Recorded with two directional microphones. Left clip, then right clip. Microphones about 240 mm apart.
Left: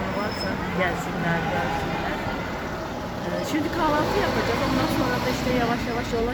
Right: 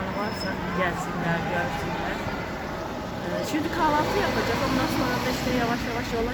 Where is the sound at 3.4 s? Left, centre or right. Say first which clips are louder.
Even; centre.